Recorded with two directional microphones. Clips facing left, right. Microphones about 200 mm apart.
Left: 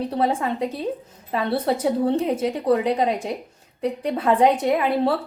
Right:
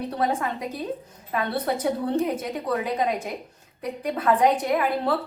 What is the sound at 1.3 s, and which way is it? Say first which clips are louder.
A woman's voice: left 4 dB; 30° left (ahead or behind).